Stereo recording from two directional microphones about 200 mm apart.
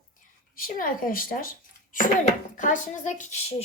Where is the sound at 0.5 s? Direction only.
45° left (ahead or behind).